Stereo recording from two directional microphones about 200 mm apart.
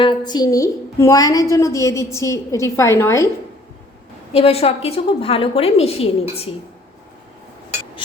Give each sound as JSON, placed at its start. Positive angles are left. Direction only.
{"t": 0.0, "sound": "a woman's voice", "side_deg": 20}
{"t": 4.3, "sound": "a woman's voice", "side_deg": 30}